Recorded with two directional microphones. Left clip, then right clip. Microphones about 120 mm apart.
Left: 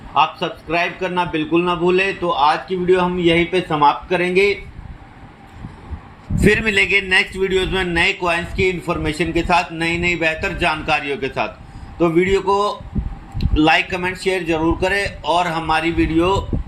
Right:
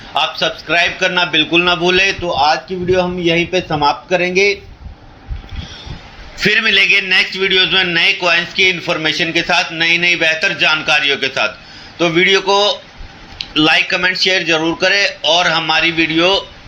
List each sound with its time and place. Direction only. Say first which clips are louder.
0.1 s a man's voice: right 1 dB; centre (ahead or behind)
6.4 s a man's voice: right 4 dB; 20° left (ahead or behind)